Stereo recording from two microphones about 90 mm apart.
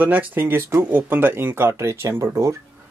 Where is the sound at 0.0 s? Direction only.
20° right (ahead or behind).